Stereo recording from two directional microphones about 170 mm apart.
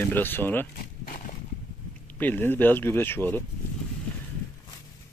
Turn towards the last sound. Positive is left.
turn(degrees=10)  # may be behind; listen again after turning